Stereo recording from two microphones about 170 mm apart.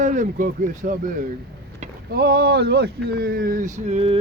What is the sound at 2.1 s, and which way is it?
Speech, 65° right (ahead or behind).